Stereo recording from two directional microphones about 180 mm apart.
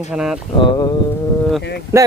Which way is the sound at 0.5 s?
25° left (ahead or behind).